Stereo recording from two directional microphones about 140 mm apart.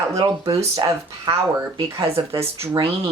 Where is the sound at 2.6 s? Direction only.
40° right (ahead or behind).